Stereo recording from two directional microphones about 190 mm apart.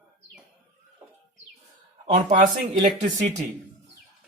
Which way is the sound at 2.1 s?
40° right (ahead or behind).